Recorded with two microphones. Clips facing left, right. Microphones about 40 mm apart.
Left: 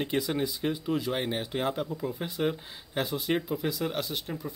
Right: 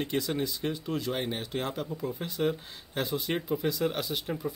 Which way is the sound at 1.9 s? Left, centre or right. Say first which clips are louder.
Left 1 dB; centre.